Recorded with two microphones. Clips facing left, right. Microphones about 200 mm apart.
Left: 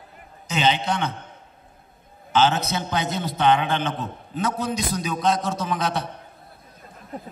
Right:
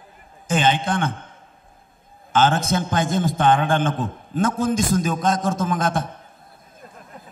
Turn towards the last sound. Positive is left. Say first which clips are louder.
# right 3 dB
turn(degrees=-50)  # may be behind; listen again after turning